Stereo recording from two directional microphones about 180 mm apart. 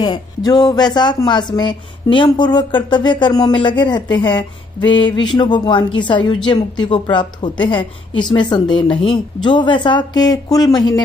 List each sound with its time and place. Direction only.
0.0 s speech: 20° left (ahead or behind)